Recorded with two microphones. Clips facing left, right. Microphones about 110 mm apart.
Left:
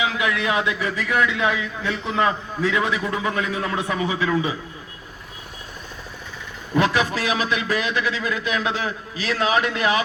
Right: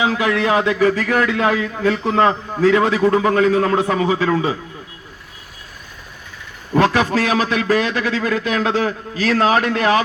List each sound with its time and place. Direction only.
0.0 s a man's voice: 35° right (ahead or behind)
6.7 s a man's voice: 40° right (ahead or behind)